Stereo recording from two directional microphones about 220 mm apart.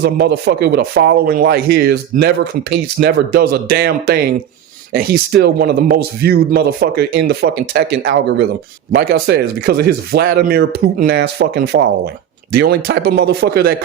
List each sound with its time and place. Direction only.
0.0 s speech: 45° right (ahead or behind)